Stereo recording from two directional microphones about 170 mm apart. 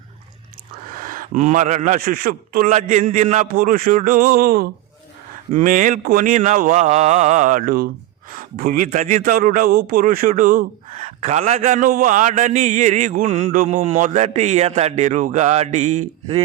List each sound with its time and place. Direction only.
0.9 s a man's voice: 55° right (ahead or behind)
3.5 s speech: 55° right (ahead or behind)
5.5 s a man's voice: 50° right (ahead or behind)
8.9 s a man's voice: 45° right (ahead or behind)